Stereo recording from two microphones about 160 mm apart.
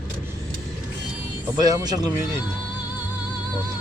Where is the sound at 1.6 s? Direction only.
25° right (ahead or behind).